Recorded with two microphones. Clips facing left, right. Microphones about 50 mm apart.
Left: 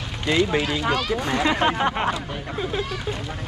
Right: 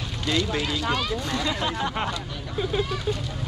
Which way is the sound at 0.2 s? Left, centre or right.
Left.